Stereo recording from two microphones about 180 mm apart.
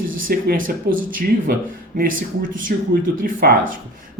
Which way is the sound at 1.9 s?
50° right (ahead or behind).